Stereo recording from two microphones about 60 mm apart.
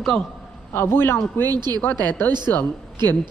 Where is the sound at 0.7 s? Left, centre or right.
Left.